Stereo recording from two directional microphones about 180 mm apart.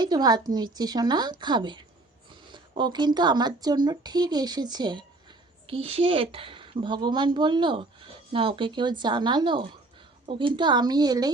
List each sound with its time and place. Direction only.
0.0 s speech: 20° right (ahead or behind)